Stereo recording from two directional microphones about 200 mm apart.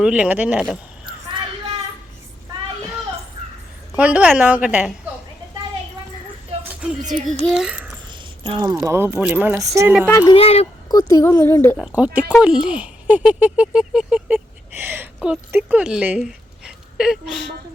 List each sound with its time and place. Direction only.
0.0 s speech: 5° right (ahead or behind)
1.0 s child singing: 25° right (ahead or behind)
3.9 s speech: 5° right (ahead or behind)
6.8 s a child's voice: 5° right (ahead or behind)
8.0 s a sound: 25° right (ahead or behind)
8.6 s speech: 15° right (ahead or behind)
10.1 s a woman's voice: 15° left (ahead or behind)
10.3 s speech: 30° left (ahead or behind)
10.8 s a woman's voice: 15° left (ahead or behind)
11.8 s speech: 5° right (ahead or behind)